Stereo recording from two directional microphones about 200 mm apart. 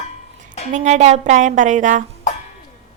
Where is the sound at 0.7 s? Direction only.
35° right (ahead or behind).